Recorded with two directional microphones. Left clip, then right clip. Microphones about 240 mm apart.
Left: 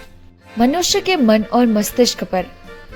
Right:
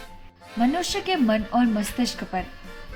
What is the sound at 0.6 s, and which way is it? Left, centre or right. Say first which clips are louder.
Speech: left 8 dB; left.